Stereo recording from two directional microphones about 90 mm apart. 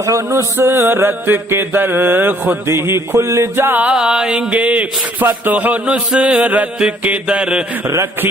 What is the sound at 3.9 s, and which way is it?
Speech, 10° right (ahead or behind).